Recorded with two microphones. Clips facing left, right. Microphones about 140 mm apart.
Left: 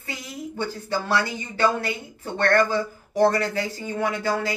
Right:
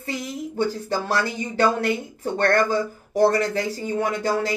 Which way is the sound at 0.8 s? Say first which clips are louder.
Right 1 dB; 40° right (ahead or behind).